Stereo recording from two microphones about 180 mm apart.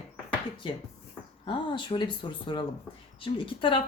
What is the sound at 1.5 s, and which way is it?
A woman's voice, 25° left (ahead or behind).